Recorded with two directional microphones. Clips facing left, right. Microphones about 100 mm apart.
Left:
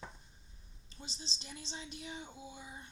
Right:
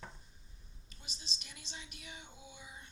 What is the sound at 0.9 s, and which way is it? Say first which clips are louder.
A woman's voice: left 4 dB; 30° left (ahead or behind).